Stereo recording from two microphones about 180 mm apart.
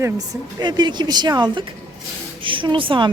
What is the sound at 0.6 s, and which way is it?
A woman's voice, 25° right (ahead or behind).